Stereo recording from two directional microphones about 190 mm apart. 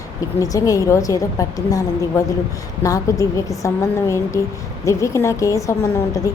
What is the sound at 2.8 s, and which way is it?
Speech, 20° left (ahead or behind).